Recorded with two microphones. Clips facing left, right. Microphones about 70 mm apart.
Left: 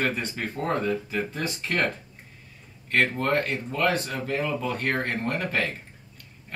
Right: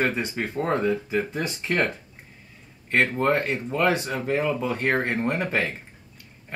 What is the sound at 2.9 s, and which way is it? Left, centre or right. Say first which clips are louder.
Speech: right 2 dB; centre.